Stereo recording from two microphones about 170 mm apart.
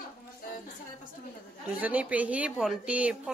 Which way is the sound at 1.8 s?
10° right (ahead or behind).